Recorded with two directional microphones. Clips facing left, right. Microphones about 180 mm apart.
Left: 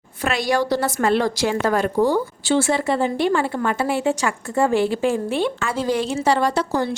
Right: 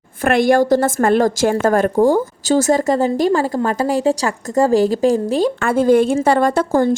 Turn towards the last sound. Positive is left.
turn(degrees=-50)  # may be behind; listen again after turning